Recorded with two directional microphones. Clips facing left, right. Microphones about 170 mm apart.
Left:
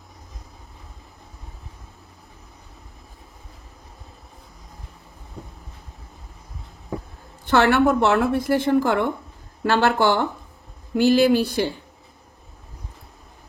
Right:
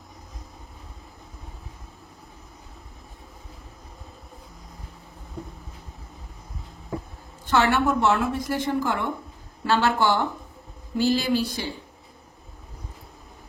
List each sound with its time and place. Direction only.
7.4 s a woman's voice: 60° left (ahead or behind)